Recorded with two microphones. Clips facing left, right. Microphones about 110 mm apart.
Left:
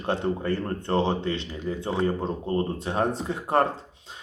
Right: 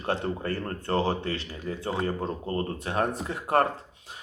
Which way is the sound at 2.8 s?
30° left (ahead or behind).